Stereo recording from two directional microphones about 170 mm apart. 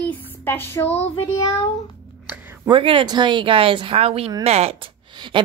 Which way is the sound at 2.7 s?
30° right (ahead or behind).